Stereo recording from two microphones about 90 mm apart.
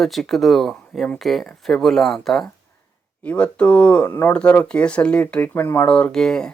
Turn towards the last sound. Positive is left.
turn(degrees=10)  # may be behind; listen again after turning